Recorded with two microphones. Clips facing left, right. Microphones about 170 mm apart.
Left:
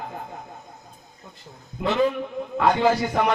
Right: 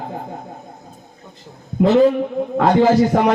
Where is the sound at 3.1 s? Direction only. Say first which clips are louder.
Right 7 dB; 45° right (ahead or behind).